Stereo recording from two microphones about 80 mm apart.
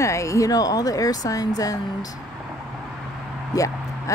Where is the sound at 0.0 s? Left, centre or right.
Left.